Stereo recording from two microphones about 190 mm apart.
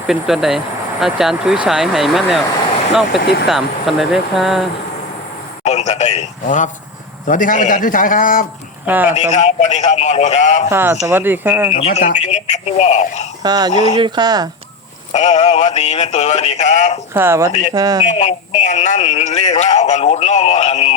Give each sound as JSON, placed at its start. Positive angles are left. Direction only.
{"t": 0.1, "sound": "speech", "side_deg": 0}
{"t": 3.4, "sound": "speech", "side_deg": 0}
{"t": 5.6, "sound": "a man's voice", "side_deg": 35}
{"t": 8.9, "sound": "speech", "side_deg": -10}
{"t": 9.1, "sound": "speech", "side_deg": 35}
{"t": 10.7, "sound": "speech", "side_deg": -10}
{"t": 11.7, "sound": "speech", "side_deg": 35}
{"t": 13.4, "sound": "speech", "side_deg": -20}
{"t": 15.1, "sound": "speech", "side_deg": 35}
{"t": 17.2, "sound": "speech", "side_deg": -15}
{"t": 18.1, "sound": "speech", "side_deg": 40}